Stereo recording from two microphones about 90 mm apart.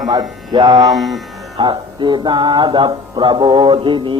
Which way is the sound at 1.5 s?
60° right (ahead or behind).